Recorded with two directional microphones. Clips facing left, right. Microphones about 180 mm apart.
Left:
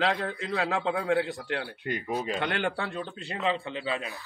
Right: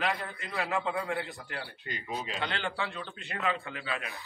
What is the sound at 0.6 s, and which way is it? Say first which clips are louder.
Speech: left 4 dB; 90° left.